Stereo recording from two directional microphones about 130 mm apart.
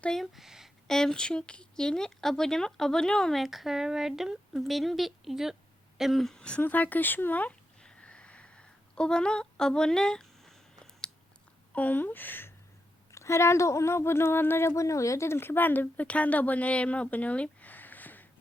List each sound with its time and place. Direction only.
0.0 s speech: 5° left (ahead or behind)
6.0 s a sound: centre (ahead or behind)
11.7 s speech: 10° left (ahead or behind)